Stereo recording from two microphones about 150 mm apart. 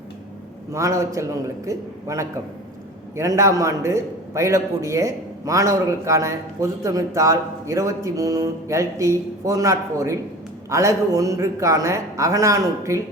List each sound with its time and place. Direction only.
0.7 s a man's voice: 20° right (ahead or behind)